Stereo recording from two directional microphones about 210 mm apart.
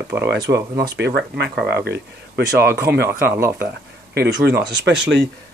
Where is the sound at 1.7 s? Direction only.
50° right (ahead or behind).